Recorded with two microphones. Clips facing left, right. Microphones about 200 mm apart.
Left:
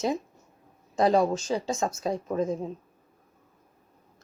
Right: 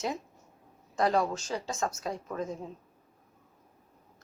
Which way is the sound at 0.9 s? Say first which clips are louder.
Left 5 dB; 25° left (ahead or behind).